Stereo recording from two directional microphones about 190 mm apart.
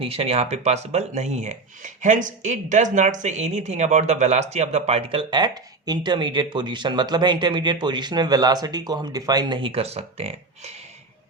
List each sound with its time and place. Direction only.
0.0 s speech: 30° right (ahead or behind)